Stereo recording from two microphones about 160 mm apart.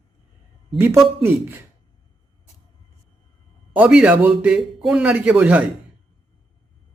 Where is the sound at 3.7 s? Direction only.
5° right (ahead or behind).